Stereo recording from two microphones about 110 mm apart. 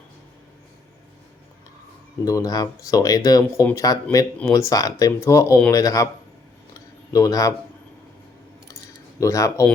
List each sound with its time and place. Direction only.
2.2 s speech: 30° left (ahead or behind)
6.7 s a sound: 30° left (ahead or behind)
9.2 s speech: 30° left (ahead or behind)